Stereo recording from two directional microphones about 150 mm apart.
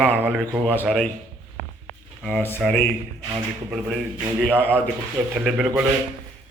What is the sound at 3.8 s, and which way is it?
A man's voice, centre (ahead or behind).